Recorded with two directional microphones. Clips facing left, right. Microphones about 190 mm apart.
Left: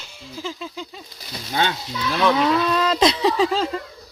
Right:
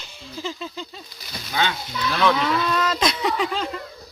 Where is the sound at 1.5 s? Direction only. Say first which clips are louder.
Left 2 dB; 30° left (ahead or behind).